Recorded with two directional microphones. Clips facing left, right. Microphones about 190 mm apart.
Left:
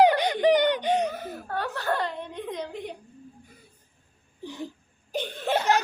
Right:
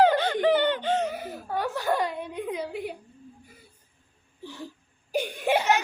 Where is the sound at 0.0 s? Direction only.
15° left (ahead or behind).